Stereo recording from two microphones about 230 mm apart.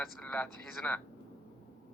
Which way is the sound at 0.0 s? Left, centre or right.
Centre.